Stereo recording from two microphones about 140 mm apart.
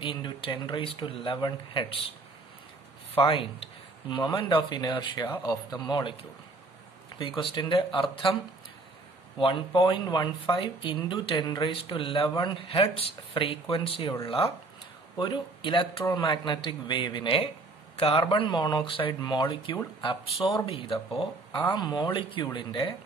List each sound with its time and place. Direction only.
0.0 s speech: 35° left (ahead or behind)
3.2 s speech: 40° left (ahead or behind)
7.2 s speech: 35° left (ahead or behind)
9.4 s speech: 35° left (ahead or behind)
21.5 s speech: 30° left (ahead or behind)